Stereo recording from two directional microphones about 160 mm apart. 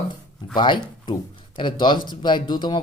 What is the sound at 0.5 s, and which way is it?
Speech, 30° left (ahead or behind).